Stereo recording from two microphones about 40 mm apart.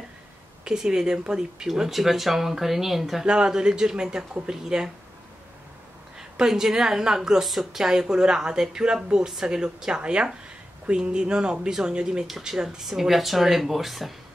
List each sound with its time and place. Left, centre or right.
0.7 s speech: centre
1.7 s speech: centre
3.3 s speech: right
6.1 s a woman's voice: centre
7.4 s speech: centre
7.8 s speech: centre
12.3 s speech: centre